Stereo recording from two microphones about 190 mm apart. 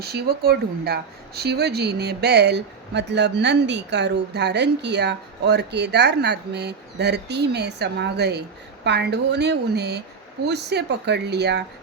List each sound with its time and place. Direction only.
0.0 s speech: 60° right (ahead or behind)